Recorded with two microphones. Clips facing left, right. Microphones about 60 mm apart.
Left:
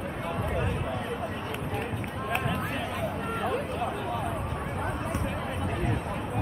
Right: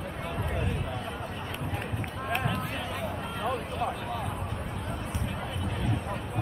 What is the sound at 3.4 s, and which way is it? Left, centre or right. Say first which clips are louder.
Speech: even; centre.